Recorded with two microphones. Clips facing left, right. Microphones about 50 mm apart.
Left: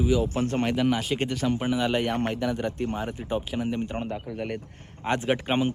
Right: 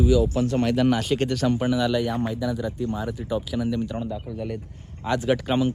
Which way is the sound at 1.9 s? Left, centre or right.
Left.